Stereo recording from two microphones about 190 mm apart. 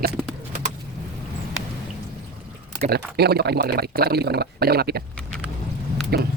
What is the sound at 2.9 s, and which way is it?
Speech, 55° right (ahead or behind).